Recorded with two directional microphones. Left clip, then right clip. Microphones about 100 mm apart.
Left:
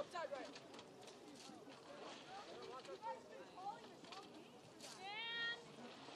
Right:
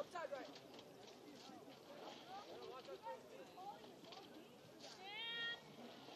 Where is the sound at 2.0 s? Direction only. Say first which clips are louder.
Even; 25° left (ahead or behind).